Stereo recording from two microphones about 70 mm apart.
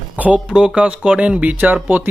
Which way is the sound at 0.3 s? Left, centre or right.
Centre.